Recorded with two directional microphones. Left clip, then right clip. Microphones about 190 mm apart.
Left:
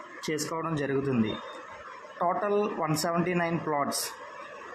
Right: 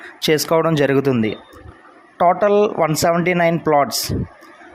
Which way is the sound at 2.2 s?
40° right (ahead or behind).